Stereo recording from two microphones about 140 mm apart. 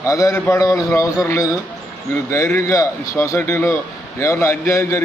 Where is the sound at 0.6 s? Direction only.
25° left (ahead or behind).